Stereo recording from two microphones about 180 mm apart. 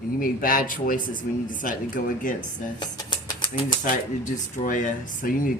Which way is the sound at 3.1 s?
25° left (ahead or behind).